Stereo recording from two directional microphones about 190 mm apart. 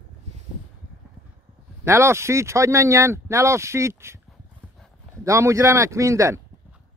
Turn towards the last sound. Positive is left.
turn(degrees=-15)  # may be behind; listen again after turning